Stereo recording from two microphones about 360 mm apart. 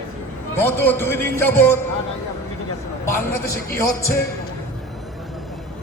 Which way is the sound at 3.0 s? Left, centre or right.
Centre.